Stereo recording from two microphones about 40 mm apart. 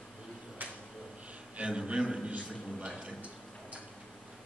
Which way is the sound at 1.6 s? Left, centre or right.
Right.